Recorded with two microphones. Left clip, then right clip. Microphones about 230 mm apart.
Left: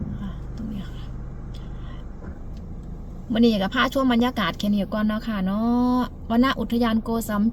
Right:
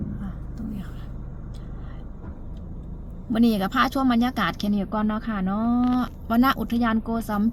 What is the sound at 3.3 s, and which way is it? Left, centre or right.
Speech, centre.